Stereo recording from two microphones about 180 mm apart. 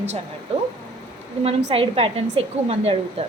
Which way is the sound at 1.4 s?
35° right (ahead or behind).